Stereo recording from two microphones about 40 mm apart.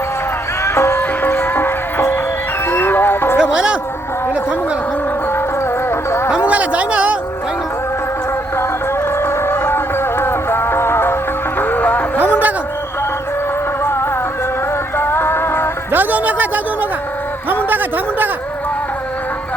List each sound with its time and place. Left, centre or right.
0.8 s music: left
1.2 s music: left
2.6 s music: left
3.5 s music: right
6.3 s a sound: right
9.2 s music: left
11.7 s music: left
14.9 s music: left
15.9 s music: right
17.5 s a sound: right